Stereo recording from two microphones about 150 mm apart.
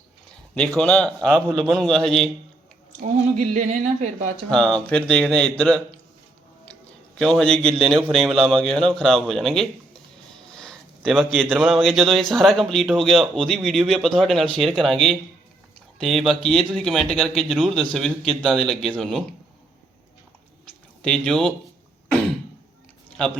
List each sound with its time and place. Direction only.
0.5 s a man's voice: 5° left (ahead or behind)
3.0 s a woman's voice: 55° right (ahead or behind)
4.4 s a man's voice: 5° left (ahead or behind)
7.2 s speech: 5° left (ahead or behind)
10.5 s a sound: 5° left (ahead or behind)
11.4 s speech: centre (ahead or behind)
21.0 s speech: 5° left (ahead or behind)
23.1 s a man's voice: 5° left (ahead or behind)